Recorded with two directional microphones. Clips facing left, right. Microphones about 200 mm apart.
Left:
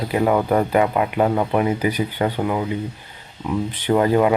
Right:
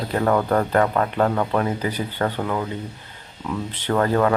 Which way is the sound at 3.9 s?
15° left (ahead or behind).